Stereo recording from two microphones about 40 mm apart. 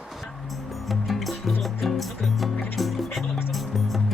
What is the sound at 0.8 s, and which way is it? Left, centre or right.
Music, centre.